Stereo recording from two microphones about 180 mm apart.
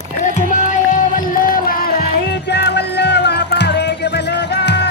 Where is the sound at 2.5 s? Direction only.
70° left (ahead or behind).